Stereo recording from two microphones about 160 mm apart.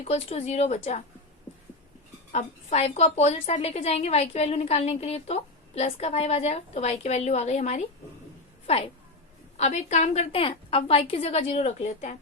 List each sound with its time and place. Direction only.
0.0 s speech: 40° left (ahead or behind)
2.3 s a woman's voice: 40° left (ahead or behind)